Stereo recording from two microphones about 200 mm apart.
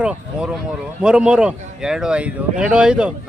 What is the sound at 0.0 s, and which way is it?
Speech, 5° right (ahead or behind).